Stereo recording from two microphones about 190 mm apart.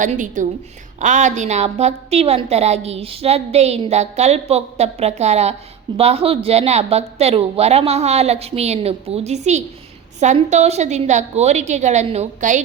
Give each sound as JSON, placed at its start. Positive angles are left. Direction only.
{"t": 0.0, "sound": "a woman's voice", "side_deg": -40}